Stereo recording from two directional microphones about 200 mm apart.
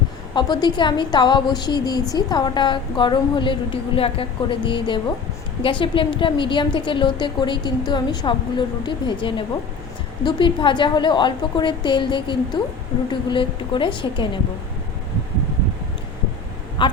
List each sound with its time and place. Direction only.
0.3 s a woman's voice: 20° left (ahead or behind)
16.8 s speech: 25° left (ahead or behind)